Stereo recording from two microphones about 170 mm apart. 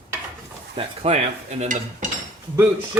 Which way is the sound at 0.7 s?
35° right (ahead or behind).